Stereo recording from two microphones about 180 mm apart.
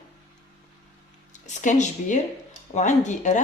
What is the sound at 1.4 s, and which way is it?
Speech, 40° left (ahead or behind).